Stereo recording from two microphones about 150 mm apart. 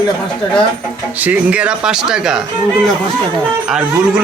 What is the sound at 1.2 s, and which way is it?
A man's voice, 10° right (ahead or behind).